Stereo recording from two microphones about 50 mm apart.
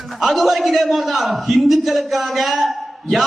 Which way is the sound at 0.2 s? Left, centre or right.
Centre.